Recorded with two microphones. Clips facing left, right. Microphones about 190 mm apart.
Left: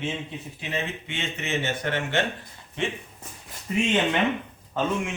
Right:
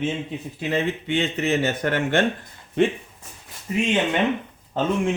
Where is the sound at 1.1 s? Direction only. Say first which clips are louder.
Right 9 dB; 35° right (ahead or behind).